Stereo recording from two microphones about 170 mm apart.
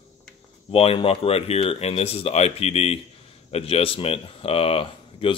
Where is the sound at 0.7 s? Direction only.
35° left (ahead or behind).